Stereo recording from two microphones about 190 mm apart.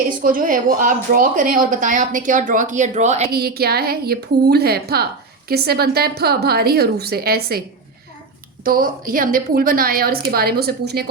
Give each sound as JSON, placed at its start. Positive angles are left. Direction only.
{"t": 0.2, "sound": "a woman's voice", "side_deg": -45}
{"t": 3.2, "sound": "a woman's voice", "side_deg": -55}
{"t": 8.6, "sound": "a woman's voice", "side_deg": -50}